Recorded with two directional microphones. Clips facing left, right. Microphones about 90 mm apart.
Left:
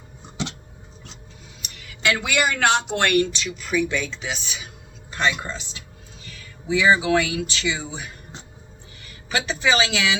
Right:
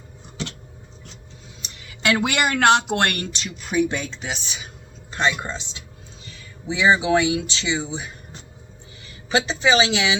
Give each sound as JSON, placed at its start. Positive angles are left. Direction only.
{"t": 2.0, "sound": "speech", "side_deg": -45}
{"t": 5.1, "sound": "speech", "side_deg": -25}
{"t": 9.0, "sound": "speech", "side_deg": -25}